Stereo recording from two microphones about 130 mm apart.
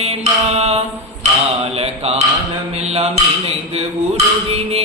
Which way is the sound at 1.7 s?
50° right (ahead or behind).